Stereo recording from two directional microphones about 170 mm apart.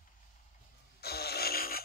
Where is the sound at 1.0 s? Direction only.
65° left (ahead or behind).